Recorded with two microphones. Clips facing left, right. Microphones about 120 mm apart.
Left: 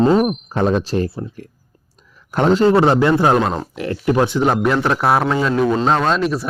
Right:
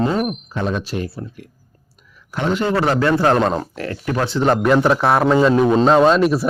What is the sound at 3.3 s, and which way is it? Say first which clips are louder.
Speech: even; 5° left (ahead or behind).